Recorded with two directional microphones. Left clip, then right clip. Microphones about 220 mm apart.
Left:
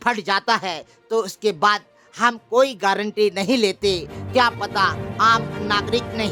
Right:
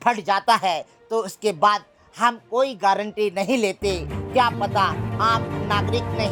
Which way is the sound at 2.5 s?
30° left (ahead or behind).